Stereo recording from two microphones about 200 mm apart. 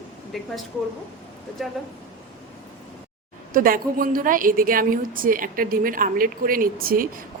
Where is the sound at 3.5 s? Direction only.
45° right (ahead or behind).